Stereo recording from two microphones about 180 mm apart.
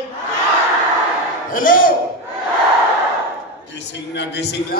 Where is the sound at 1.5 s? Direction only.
50° left (ahead or behind).